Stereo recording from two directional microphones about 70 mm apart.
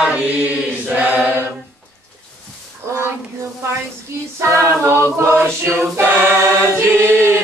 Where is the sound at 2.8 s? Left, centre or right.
Right.